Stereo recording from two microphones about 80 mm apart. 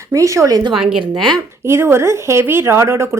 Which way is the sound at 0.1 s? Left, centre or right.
Right.